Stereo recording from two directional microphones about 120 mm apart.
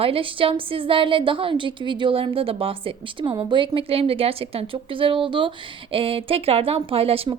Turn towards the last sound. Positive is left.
turn(degrees=-50)  # may be behind; listen again after turning